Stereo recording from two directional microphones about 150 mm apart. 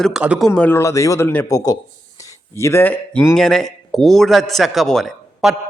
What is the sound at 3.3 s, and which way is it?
A man's voice, 5° left (ahead or behind).